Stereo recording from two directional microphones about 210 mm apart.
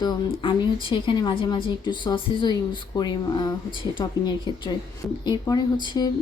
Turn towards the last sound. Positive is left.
turn(degrees=20)  # may be behind; listen again after turning